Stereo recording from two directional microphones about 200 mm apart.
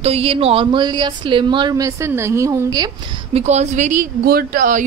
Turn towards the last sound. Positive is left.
turn(degrees=-45)  # may be behind; listen again after turning